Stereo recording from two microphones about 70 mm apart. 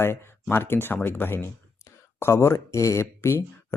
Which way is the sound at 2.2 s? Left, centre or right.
Left.